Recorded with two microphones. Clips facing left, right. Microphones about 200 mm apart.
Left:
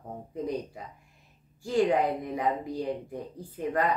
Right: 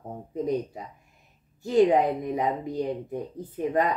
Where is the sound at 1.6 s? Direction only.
20° right (ahead or behind).